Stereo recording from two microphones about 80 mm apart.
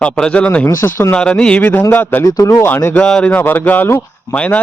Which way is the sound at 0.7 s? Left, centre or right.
Left.